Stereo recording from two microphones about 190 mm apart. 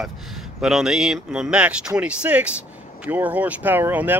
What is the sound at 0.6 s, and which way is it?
Speech, centre (ahead or behind).